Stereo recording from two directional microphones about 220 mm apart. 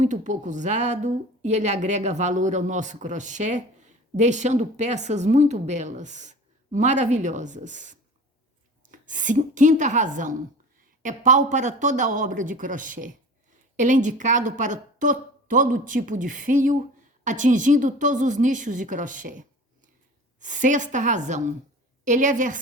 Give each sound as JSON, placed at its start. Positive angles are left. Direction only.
{"t": 0.0, "sound": "a woman's voice", "side_deg": -35}